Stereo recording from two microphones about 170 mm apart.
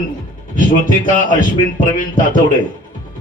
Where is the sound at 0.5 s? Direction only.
50° left (ahead or behind).